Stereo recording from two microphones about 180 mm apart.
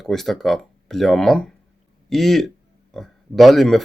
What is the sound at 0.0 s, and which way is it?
Speech, centre (ahead or behind).